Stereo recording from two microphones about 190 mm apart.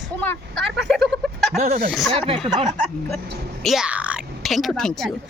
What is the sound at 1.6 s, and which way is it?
Speech, 35° right (ahead or behind).